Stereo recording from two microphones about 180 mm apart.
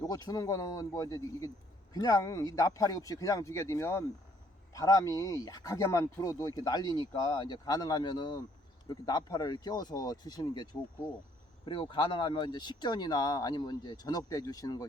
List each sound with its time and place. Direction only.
0.0 s speech: 20° left (ahead or behind)